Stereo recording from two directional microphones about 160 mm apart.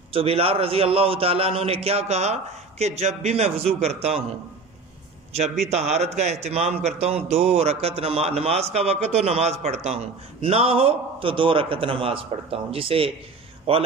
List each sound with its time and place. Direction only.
0.1 s a man's voice: 35° right (ahead or behind)
5.3 s a man's voice: 45° right (ahead or behind)